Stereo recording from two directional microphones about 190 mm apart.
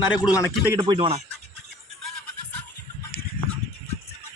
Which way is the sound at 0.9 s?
30° right (ahead or behind).